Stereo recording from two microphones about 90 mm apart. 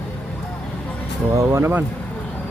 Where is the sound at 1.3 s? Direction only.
30° right (ahead or behind).